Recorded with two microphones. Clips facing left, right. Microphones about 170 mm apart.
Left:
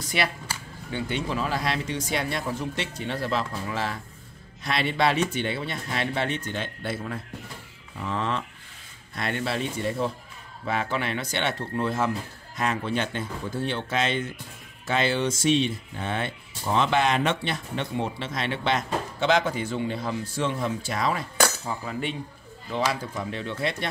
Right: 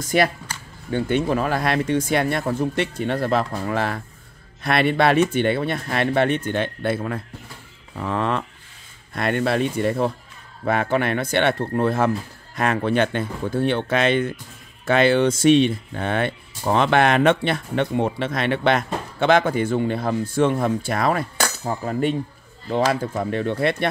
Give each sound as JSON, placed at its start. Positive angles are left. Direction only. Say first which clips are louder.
{"t": 0.0, "sound": "speech", "louder": "right 8 dB", "side_deg": -45}
{"t": 21.6, "sound": "speech", "louder": "right 8 dB", "side_deg": -45}